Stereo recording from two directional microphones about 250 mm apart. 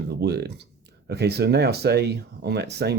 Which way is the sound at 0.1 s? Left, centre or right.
Right.